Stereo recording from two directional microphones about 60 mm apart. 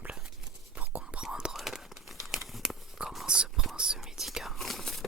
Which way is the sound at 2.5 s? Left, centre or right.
Centre.